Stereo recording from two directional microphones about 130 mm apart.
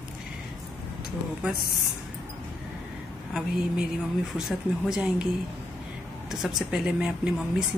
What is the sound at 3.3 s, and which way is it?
Speech, 5° right (ahead or behind).